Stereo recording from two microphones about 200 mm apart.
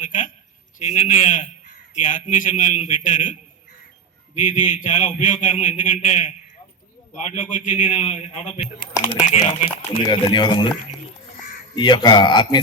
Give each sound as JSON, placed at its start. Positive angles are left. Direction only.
{"t": 0.0, "sound": "a man's voice", "side_deg": 40}
{"t": 4.4, "sound": "a man's voice", "side_deg": 40}
{"t": 11.8, "sound": "speech", "side_deg": 20}